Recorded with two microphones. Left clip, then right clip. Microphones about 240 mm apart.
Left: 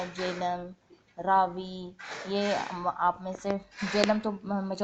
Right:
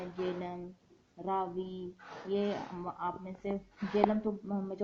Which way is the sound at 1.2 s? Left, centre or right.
Left.